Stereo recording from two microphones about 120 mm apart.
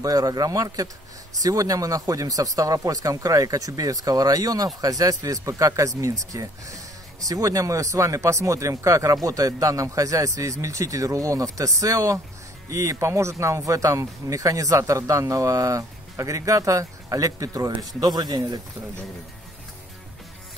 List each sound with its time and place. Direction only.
0.0 s speech: 30° right (ahead or behind)